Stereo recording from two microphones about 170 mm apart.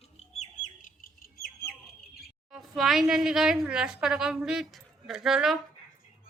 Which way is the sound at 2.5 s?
Centre (ahead or behind).